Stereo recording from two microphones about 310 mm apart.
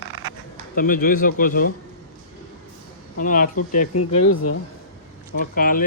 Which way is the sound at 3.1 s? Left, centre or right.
Left.